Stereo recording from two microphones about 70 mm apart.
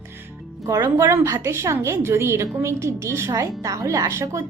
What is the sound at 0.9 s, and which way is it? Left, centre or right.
A woman's voice, right.